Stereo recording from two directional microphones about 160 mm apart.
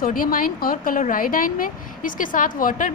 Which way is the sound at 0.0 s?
60° left (ahead or behind).